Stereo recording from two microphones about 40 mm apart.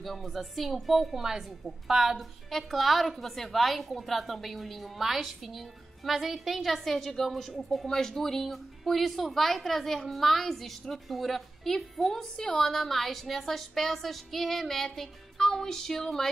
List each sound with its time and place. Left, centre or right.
0.0 s a woman's voice: centre
2.1 s a woman's voice: centre